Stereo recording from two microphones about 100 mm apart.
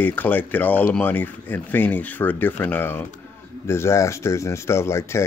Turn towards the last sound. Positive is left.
turn(degrees=25)  # may be behind; listen again after turning